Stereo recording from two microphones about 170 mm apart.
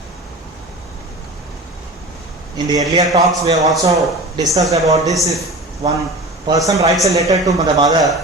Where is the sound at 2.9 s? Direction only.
20° right (ahead or behind).